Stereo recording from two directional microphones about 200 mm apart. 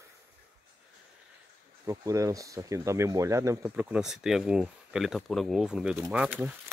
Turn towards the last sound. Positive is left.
turn(degrees=-5)  # may be behind; listen again after turning